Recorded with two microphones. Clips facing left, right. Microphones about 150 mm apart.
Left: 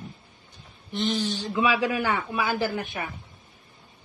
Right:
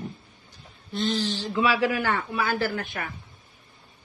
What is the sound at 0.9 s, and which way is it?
Speech, 15° left (ahead or behind).